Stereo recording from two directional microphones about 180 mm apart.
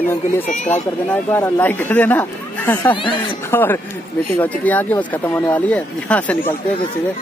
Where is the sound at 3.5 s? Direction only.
10° left (ahead or behind).